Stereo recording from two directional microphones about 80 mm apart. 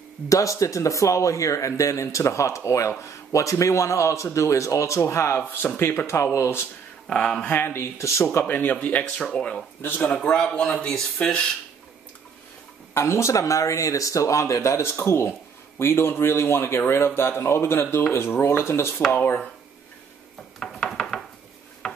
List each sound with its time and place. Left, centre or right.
0.3 s speech: left
7.1 s speech: centre
7.4 s speech: left
8.3 s speech: left; by 9.6 s centre
9.8 s speech: left
10.1 s speech: centre
12.9 s speech: left
20.5 s a sound: centre